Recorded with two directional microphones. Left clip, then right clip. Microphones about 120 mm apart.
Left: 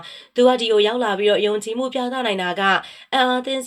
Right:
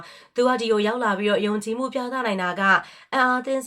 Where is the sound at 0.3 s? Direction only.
20° left (ahead or behind).